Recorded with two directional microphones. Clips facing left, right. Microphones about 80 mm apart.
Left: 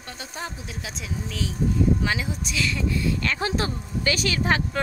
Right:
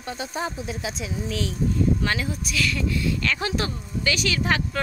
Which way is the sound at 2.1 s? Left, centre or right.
Centre.